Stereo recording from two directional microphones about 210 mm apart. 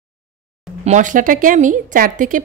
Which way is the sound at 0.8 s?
35° right (ahead or behind).